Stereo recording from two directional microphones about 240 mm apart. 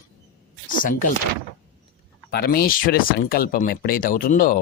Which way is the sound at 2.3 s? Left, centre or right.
Left.